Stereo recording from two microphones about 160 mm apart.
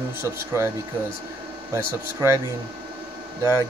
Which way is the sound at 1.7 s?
15° right (ahead or behind).